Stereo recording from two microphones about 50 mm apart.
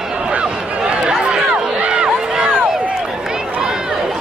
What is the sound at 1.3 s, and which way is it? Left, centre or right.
Run, centre.